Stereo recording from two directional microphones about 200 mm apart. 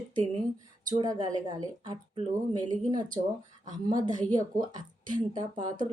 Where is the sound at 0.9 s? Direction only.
20° right (ahead or behind).